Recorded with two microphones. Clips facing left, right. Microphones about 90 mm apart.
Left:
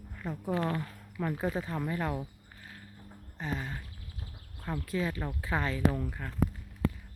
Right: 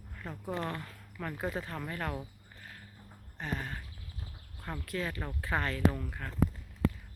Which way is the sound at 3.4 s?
5° left (ahead or behind).